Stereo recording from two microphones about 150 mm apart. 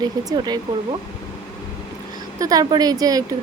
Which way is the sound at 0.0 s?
25° right (ahead or behind).